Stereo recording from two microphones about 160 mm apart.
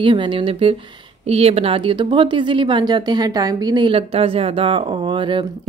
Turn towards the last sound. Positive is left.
turn(degrees=-30)  # may be behind; listen again after turning